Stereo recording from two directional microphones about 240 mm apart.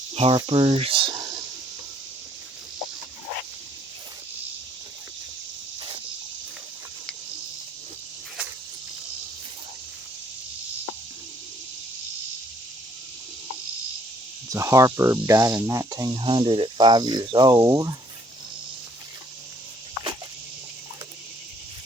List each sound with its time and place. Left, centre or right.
0.1 s speech: right
14.5 s speech: centre